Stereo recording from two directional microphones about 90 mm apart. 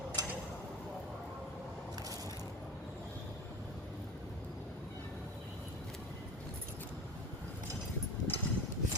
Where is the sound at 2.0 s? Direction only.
40° right (ahead or behind).